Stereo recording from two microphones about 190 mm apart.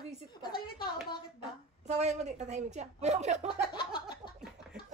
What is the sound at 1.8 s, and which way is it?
A woman's voice, 35° right (ahead or behind).